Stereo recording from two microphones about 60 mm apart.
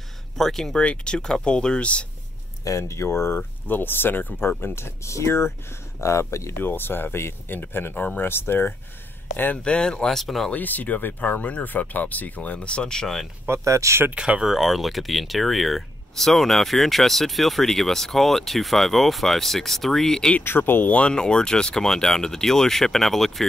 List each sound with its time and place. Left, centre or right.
0.4 s speech: centre
0.7 s speech: centre
2.8 s speech: left
3.3 s speech: left
6.6 s speech: left
9.6 s speech: centre
10.1 s speech: centre
10.5 s speech: left; by 13.3 s centre
13.5 s speech: right
14.1 s speech: centre
20.4 s speech: left
20.9 s speech: centre